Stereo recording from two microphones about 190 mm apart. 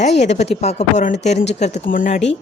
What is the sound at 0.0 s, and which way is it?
A woman's voice, 35° left (ahead or behind).